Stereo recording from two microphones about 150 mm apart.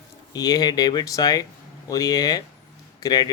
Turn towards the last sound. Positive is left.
turn(degrees=25)  # may be behind; listen again after turning